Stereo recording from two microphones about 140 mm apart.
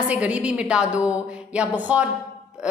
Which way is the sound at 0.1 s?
10° right (ahead or behind).